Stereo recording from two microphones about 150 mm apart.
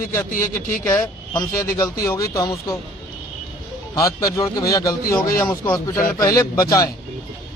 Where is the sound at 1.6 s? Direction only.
25° left (ahead or behind).